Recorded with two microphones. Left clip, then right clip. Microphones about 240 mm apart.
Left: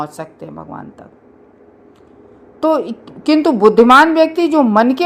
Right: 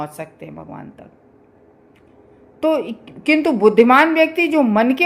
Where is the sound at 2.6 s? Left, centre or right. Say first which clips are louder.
Left 3 dB; left.